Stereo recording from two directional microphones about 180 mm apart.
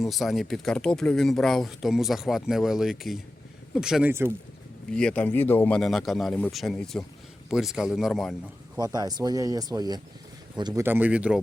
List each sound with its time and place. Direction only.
0.0 s speech: centre (ahead or behind)
8.8 s speech: 20° right (ahead or behind)
10.8 s speech: 10° right (ahead or behind)